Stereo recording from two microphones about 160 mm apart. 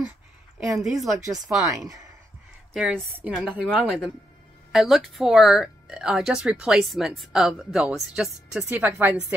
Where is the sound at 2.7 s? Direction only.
5° right (ahead or behind).